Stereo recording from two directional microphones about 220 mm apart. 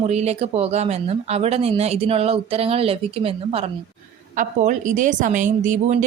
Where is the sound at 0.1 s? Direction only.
30° right (ahead or behind).